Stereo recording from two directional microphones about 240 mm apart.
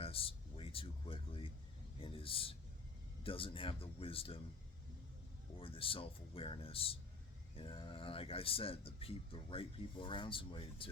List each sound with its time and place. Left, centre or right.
0.0 s a sound: left
3.2 s speech: left
5.5 s speech: left